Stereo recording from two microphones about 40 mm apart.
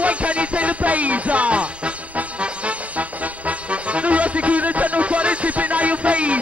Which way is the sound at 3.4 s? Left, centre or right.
Right.